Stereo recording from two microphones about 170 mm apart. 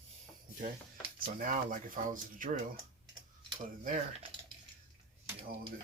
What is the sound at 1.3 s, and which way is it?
Speech, 50° right (ahead or behind).